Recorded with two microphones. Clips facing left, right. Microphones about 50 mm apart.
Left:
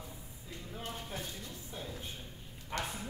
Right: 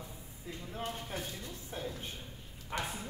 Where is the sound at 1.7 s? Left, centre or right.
Right.